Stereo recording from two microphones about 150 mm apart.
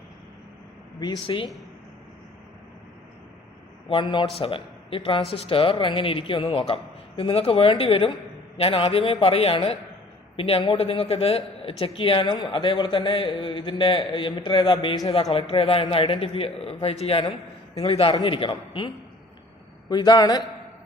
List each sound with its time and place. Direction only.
0.9 s a man's voice: 30° left (ahead or behind)
3.8 s a man's voice: 35° left (ahead or behind)
19.9 s a man's voice: 25° left (ahead or behind)